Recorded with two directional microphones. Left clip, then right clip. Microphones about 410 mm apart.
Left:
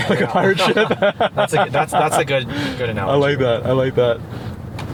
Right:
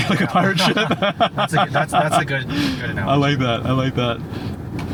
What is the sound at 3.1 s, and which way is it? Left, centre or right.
Speech, centre.